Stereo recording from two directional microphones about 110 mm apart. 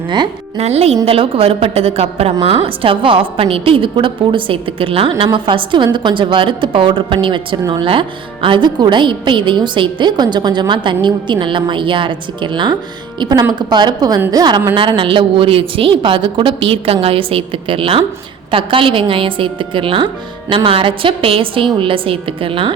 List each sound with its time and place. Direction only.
0.5 s a woman's voice: 70° right (ahead or behind); by 14.6 s 35° right (ahead or behind)
14.8 s a woman's voice: 50° right (ahead or behind)